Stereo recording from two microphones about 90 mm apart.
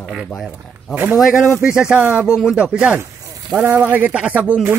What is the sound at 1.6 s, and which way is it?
Speech, 10° right (ahead or behind).